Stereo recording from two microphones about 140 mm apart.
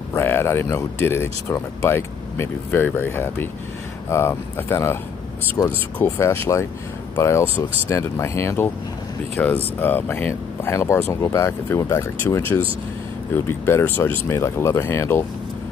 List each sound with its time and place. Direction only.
0.1 s speech: 15° left (ahead or behind)